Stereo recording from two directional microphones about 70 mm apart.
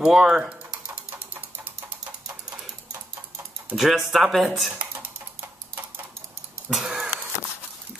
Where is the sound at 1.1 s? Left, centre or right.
Right.